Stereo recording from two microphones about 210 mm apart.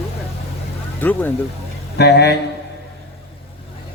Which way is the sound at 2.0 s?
55° left (ahead or behind).